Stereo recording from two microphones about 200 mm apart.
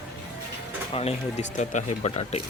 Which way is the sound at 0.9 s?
30° left (ahead or behind).